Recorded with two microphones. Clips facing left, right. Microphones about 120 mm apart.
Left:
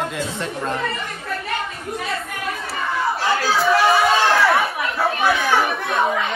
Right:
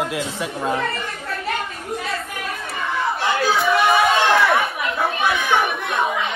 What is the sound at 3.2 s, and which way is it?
Chatter, 20° right (ahead or behind).